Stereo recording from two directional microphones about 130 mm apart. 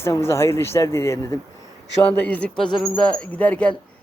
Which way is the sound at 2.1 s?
10° left (ahead or behind).